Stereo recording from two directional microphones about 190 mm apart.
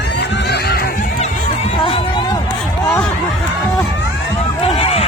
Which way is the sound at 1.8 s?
25° left (ahead or behind).